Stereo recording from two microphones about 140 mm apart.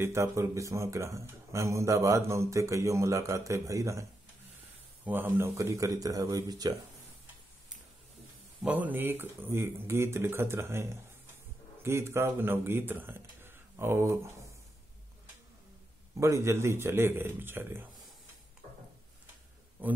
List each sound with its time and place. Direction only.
0.0 s a man's voice: 20° right (ahead or behind)
8.6 s a man's voice: 10° right (ahead or behind)
16.2 s speech: 20° right (ahead or behind)